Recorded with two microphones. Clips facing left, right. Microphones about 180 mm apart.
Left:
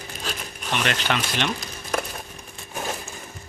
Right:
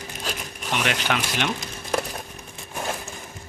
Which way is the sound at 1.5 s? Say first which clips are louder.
Right 1 dB; 20° right (ahead or behind).